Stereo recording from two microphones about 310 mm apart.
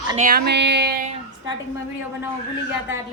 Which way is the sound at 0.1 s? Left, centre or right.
Right.